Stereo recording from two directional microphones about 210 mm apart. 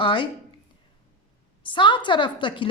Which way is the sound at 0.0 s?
20° left (ahead or behind).